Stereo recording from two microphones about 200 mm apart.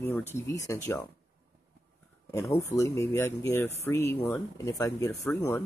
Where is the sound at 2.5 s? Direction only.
15° left (ahead or behind).